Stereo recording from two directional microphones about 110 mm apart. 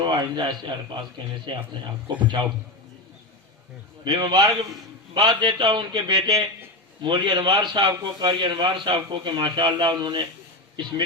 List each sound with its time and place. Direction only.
0.0 s a man's voice: 45° right (ahead or behind)
4.0 s a man's voice: 40° right (ahead or behind)